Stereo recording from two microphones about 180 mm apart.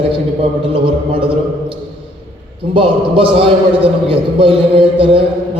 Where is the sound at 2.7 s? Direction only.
30° right (ahead or behind).